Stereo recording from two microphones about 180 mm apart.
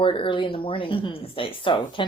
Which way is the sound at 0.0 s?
30° left (ahead or behind).